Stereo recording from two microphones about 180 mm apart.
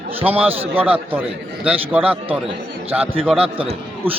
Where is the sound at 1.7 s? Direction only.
10° right (ahead or behind).